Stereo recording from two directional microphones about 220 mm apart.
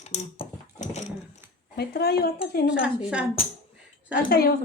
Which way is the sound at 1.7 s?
45° left (ahead or behind).